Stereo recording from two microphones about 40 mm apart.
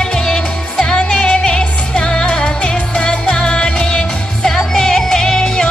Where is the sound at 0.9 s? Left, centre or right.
Left.